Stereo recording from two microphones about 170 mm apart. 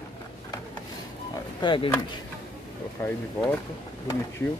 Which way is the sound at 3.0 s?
15° left (ahead or behind).